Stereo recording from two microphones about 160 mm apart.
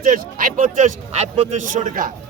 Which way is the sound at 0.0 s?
60° right (ahead or behind).